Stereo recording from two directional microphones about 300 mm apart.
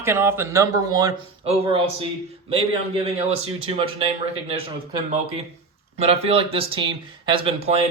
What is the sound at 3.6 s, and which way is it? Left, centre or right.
Speech, centre.